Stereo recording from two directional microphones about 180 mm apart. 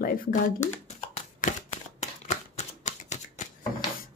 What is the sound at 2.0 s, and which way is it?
Shuffling cards, 40° left (ahead or behind).